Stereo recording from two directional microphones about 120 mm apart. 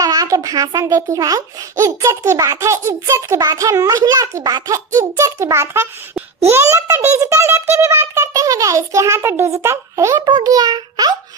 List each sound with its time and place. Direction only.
0.0 s a child's voice: 30° right (ahead or behind)